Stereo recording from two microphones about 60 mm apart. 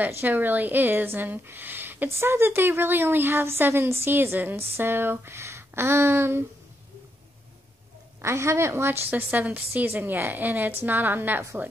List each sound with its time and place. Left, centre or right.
0.1 s speech: right
8.2 s a woman's voice: right
9.1 s speech: right